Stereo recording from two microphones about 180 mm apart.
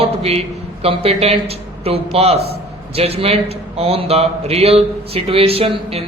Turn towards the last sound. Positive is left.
turn(degrees=-30)  # may be behind; listen again after turning